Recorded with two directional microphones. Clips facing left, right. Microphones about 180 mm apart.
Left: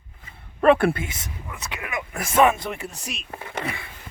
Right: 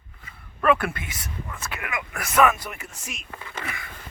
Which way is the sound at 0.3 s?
30° left (ahead or behind).